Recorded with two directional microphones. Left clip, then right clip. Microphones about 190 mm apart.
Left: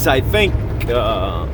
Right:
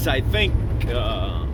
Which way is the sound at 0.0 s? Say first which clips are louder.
Left 7 dB; 40° left (ahead or behind).